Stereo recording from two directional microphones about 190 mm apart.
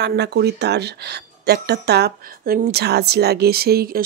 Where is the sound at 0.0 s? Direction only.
60° right (ahead or behind).